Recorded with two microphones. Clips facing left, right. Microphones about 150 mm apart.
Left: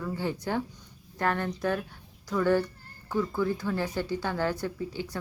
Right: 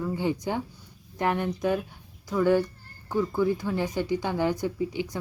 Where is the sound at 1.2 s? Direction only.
15° right (ahead or behind).